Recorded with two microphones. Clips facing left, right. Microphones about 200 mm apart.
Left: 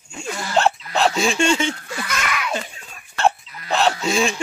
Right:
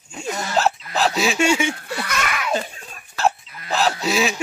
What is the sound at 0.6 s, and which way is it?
Hiccup, centre (ahead or behind).